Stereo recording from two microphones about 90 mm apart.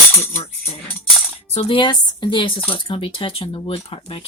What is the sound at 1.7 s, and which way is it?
A woman's voice, 60° left (ahead or behind).